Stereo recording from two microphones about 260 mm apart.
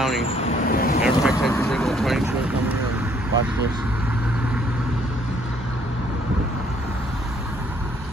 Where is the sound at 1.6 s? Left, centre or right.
Centre.